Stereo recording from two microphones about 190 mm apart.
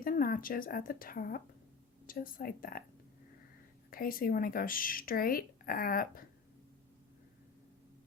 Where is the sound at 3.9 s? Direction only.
50° left (ahead or behind).